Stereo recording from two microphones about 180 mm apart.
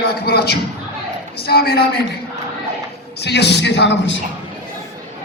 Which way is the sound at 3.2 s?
70° left (ahead or behind).